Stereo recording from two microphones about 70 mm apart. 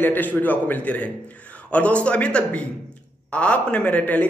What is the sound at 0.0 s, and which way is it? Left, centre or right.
A man's voice, left.